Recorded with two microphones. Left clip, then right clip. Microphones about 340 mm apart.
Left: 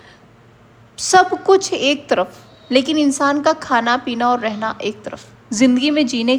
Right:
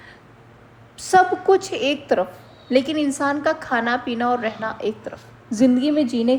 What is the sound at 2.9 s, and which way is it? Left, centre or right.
A woman's voice, centre.